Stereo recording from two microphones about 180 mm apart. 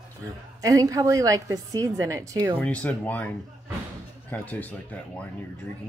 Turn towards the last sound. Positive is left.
turn(degrees=10)  # may be behind; listen again after turning